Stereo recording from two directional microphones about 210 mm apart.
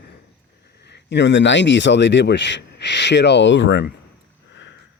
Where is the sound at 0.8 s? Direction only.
55° left (ahead or behind).